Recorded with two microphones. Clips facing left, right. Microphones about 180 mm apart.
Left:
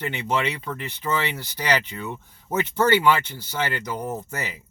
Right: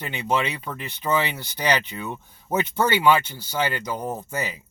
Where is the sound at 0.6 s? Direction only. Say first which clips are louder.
Even; 15° right (ahead or behind).